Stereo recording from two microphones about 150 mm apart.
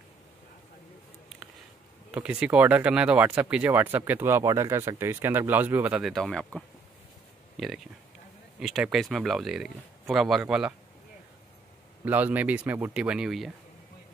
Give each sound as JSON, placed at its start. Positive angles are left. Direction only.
{"t": 2.0, "sound": "speech", "side_deg": -5}
{"t": 6.0, "sound": "speech", "side_deg": 5}
{"t": 12.0, "sound": "speech", "side_deg": -10}